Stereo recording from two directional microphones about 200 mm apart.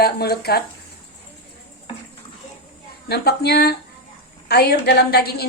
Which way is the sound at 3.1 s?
55° left (ahead or behind).